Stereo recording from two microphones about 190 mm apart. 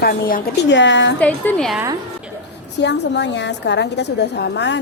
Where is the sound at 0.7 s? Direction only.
70° left (ahead or behind).